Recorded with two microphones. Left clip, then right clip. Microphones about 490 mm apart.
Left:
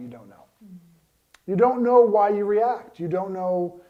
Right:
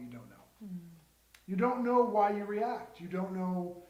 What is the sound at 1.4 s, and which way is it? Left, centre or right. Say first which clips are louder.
A man's voice: left 12 dB; left.